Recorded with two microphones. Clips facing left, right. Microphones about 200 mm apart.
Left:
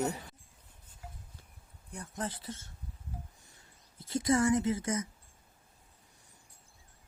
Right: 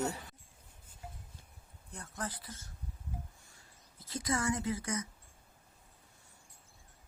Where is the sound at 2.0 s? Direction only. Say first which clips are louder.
Left 3 dB; 25° left (ahead or behind).